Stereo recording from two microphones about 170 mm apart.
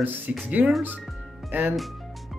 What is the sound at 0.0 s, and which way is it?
Speech, 5° right (ahead or behind).